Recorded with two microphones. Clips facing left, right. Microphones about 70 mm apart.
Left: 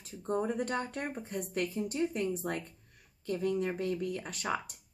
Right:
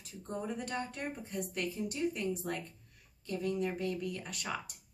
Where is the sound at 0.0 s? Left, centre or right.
Left.